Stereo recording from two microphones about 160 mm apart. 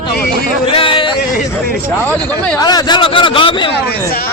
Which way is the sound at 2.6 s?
25° left (ahead or behind).